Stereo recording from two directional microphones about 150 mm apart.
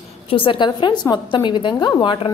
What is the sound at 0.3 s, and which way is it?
A woman's voice, 35° left (ahead or behind).